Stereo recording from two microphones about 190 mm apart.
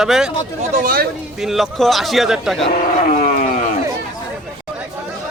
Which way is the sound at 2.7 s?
40° left (ahead or behind).